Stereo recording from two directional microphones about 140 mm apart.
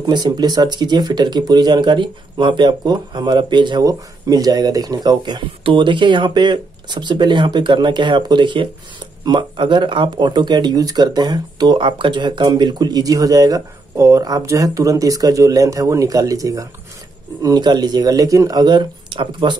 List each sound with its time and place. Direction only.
0.0 s speech: 30° right (ahead or behind)